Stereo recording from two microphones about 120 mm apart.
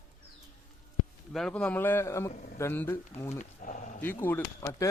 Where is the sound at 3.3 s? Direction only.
90° left.